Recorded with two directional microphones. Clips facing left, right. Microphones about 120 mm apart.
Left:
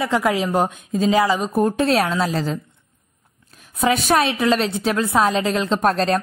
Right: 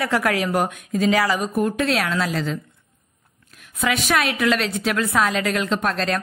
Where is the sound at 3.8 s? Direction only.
35° left (ahead or behind).